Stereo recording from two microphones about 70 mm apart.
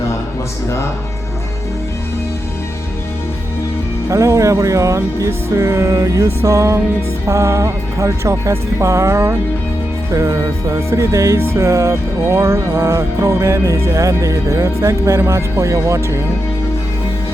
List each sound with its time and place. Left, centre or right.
4.1 s music: right